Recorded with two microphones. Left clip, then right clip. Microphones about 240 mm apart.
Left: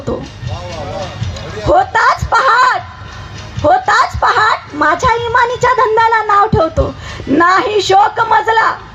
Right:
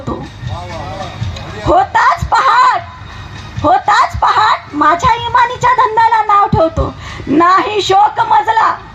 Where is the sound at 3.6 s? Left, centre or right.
Right.